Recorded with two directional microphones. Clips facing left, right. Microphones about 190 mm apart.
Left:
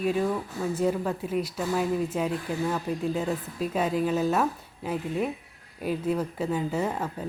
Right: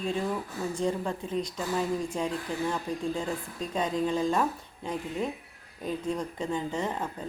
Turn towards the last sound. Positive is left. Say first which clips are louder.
# left 3 dB
turn(degrees=10)  # may be behind; listen again after turning